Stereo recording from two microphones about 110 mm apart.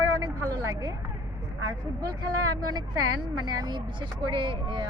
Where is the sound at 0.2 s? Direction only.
30° right (ahead or behind).